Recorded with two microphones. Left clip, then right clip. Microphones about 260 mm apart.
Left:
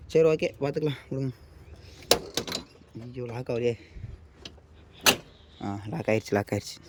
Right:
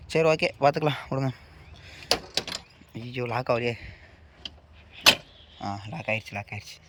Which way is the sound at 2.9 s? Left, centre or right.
Right.